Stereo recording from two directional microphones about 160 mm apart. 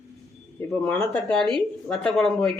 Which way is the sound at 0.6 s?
15° left (ahead or behind).